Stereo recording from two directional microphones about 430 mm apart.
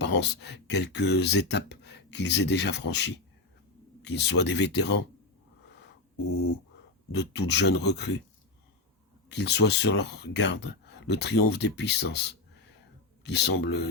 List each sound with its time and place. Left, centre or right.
0.0 s speech: left
1.8 s a sound: left
2.6 s speech: left
7.1 s speech: left
9.3 s speech: left